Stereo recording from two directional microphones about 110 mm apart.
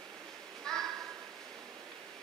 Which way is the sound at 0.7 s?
5° left (ahead or behind).